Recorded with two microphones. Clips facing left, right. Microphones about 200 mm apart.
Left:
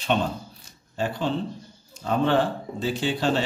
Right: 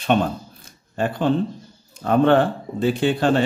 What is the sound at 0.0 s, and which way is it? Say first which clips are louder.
Speech: right 5 dB; 55° right (ahead or behind).